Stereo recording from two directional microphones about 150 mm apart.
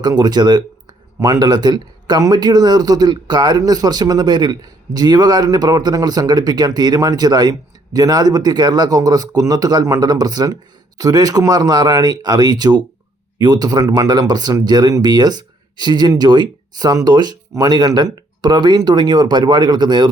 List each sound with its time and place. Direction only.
0.0 s speech: 30° right (ahead or behind)